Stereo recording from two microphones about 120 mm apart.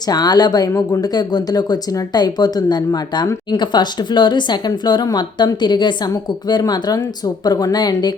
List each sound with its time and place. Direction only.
0.1 s speech: 35° left (ahead or behind)